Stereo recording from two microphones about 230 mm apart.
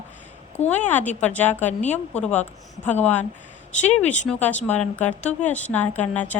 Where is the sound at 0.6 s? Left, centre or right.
Centre.